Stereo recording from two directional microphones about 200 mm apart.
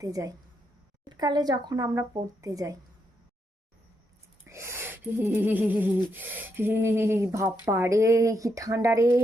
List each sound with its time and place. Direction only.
0.0 s a woman's voice: 15° right (ahead or behind)
4.4 s a sound: 15° right (ahead or behind)
6.1 s speech: 10° right (ahead or behind)